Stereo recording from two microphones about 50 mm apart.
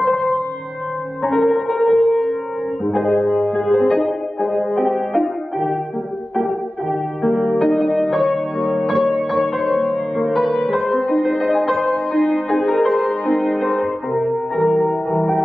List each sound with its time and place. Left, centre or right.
0.0 s music: centre
1.4 s music: centre
3.7 s music: centre
7.5 s music: centre
9.8 s music: centre
15.1 s music: centre